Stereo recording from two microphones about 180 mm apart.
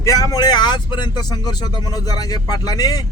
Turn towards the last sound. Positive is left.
turn(degrees=20)  # may be behind; listen again after turning